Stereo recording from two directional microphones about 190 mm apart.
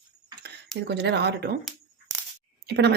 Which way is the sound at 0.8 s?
60° right (ahead or behind).